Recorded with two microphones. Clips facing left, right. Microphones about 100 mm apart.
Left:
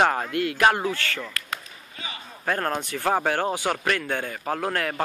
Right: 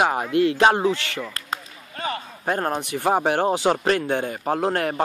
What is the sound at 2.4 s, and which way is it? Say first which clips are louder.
Speech: right 2 dB; 20° right (ahead or behind).